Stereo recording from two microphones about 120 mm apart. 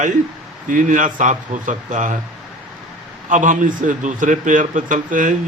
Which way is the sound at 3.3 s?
90° right.